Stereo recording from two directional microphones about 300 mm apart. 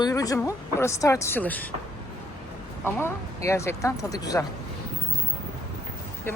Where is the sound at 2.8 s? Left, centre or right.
Centre.